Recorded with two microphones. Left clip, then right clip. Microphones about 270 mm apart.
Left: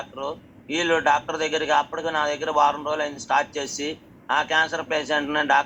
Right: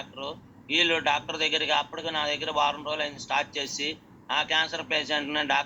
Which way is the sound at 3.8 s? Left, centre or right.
Left.